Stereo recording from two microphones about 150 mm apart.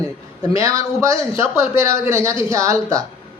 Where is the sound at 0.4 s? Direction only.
20° right (ahead or behind).